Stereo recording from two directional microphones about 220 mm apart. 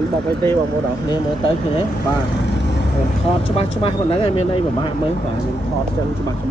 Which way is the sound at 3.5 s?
25° left (ahead or behind).